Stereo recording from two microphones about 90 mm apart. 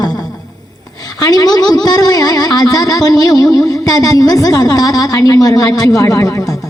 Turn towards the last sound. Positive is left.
turn(degrees=35)  # may be behind; listen again after turning